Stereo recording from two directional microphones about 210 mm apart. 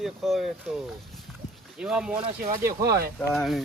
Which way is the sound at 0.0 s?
Centre (ahead or behind).